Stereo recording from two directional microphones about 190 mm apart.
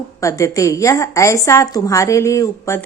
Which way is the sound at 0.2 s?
15° left (ahead or behind).